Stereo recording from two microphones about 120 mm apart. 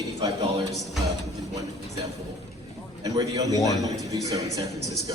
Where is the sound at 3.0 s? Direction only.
30° right (ahead or behind).